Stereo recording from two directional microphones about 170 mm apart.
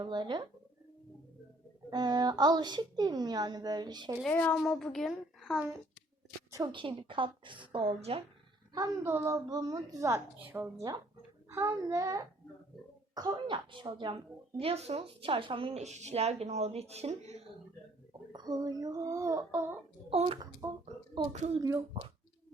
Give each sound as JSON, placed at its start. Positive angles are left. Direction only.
{"t": 0.0, "sound": "speech", "side_deg": -25}
{"t": 1.9, "sound": "a woman's voice", "side_deg": -25}
{"t": 4.3, "sound": "a woman's voice", "side_deg": 10}
{"t": 6.5, "sound": "a woman's voice", "side_deg": -25}
{"t": 8.7, "sound": "a woman's voice", "side_deg": -15}
{"t": 18.3, "sound": "a woman's voice", "side_deg": -25}
{"t": 20.1, "sound": "speech", "side_deg": -35}
{"t": 20.4, "sound": "a woman's voice", "side_deg": -20}
{"t": 21.3, "sound": "speech", "side_deg": -40}
{"t": 21.6, "sound": "a woman's voice", "side_deg": -20}